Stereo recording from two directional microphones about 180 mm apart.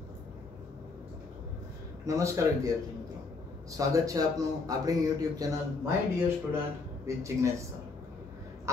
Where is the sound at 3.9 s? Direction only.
20° right (ahead or behind).